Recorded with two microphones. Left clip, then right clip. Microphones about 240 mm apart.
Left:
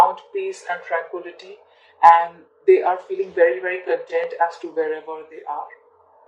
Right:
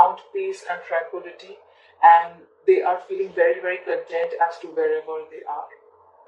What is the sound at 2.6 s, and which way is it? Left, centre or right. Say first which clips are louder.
Speech: left 3 dB; left.